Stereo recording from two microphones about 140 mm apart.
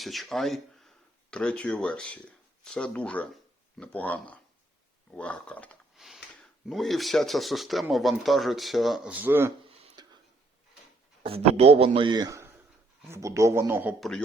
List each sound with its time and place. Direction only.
0.0 s speech: centre (ahead or behind)
6.0 s sniff: centre (ahead or behind)
6.7 s speech: centre (ahead or behind)
9.1 s speech: 15° right (ahead or behind)
9.6 s a sound: 35° right (ahead or behind)
11.2 s a man's voice: 45° right (ahead or behind); by 13.9 s 20° right (ahead or behind)